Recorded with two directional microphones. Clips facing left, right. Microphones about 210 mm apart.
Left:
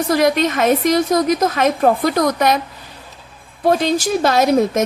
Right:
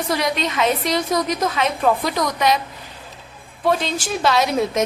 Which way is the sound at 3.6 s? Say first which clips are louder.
Left 5 dB; 45° left (ahead or behind).